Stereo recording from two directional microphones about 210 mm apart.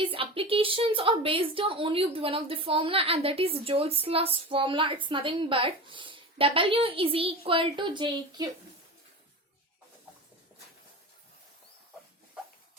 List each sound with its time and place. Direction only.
0.0 s a woman's voice: 25° right (ahead or behind)